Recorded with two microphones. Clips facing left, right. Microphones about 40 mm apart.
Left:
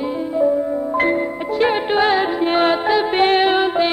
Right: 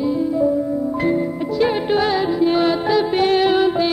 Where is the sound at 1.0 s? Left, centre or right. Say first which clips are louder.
Left 3 dB; left.